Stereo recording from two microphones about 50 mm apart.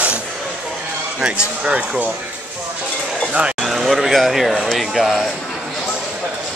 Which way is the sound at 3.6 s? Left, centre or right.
Centre.